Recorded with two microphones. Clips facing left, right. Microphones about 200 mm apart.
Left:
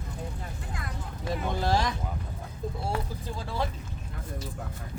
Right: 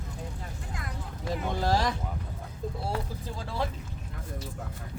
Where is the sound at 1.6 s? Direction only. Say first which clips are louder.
Right 1 dB; 40° right (ahead or behind).